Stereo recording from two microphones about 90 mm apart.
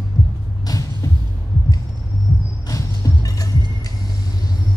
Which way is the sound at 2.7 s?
40° left (ahead or behind).